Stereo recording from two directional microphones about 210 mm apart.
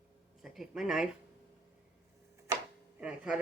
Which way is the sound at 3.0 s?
5° right (ahead or behind).